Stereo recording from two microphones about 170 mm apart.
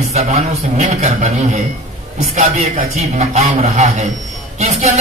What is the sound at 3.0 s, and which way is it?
Speech, 40° right (ahead or behind).